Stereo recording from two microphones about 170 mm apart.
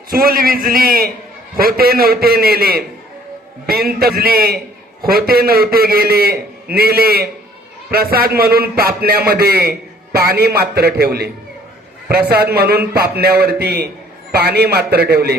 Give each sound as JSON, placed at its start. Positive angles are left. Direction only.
{"t": 0.1, "sound": "a man's voice", "side_deg": -60}